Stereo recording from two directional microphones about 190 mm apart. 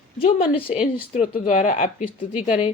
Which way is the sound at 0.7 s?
35° left (ahead or behind).